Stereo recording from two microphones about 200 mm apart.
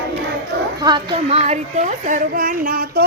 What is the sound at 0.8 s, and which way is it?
Speech, 20° right (ahead or behind).